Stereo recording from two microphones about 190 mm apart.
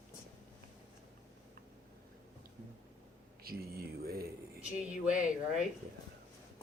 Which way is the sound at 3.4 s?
55° right (ahead or behind).